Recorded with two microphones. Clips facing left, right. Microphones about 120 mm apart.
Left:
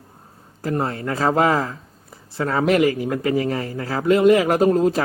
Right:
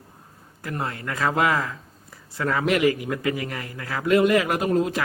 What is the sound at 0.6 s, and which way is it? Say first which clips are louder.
A man's voice: left 7 dB; 35° left (ahead or behind).